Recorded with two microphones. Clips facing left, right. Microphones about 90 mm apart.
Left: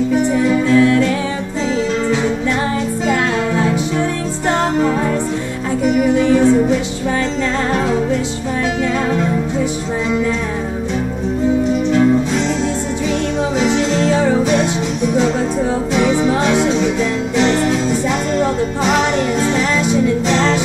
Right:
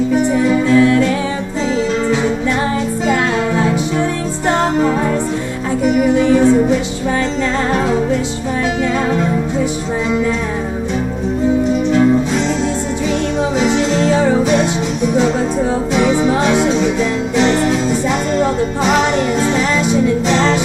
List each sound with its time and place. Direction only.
0.4 s music: 20° right (ahead or behind)
2.6 s music: 20° right (ahead or behind)
6.1 s music: 20° right (ahead or behind)
13.4 s music: 10° right (ahead or behind)
15.9 s music: 15° right (ahead or behind)